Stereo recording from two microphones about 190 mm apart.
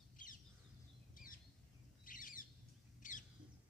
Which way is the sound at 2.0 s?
45° left (ahead or behind).